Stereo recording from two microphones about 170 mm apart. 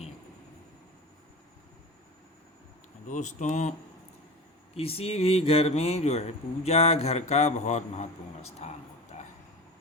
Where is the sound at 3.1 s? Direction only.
45° left (ahead or behind).